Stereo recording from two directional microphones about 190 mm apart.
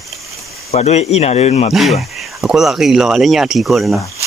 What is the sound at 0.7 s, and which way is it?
Speech, 35° left (ahead or behind).